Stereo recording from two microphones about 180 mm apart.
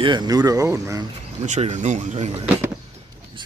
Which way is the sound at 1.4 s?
40° right (ahead or behind).